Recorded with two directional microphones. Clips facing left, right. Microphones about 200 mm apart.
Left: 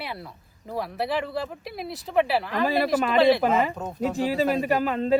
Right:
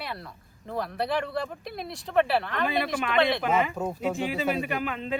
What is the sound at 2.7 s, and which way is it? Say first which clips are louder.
Speech: left 5 dB; 35° left (ahead or behind).